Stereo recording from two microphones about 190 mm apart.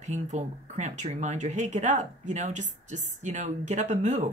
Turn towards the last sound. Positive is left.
turn(degrees=-40)  # may be behind; listen again after turning